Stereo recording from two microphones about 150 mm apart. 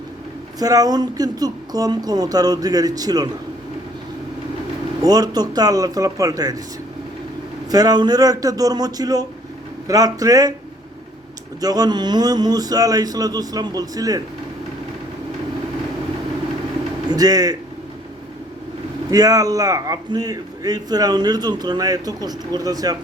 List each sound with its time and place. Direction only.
0.6 s a man's voice: 25° right (ahead or behind)
5.0 s a man's voice: 25° right (ahead or behind)
7.7 s a man's voice: 25° right (ahead or behind)
11.6 s a man's voice: 25° right (ahead or behind)
17.1 s a man's voice: 25° right (ahead or behind)
19.1 s a man's voice: 25° right (ahead or behind)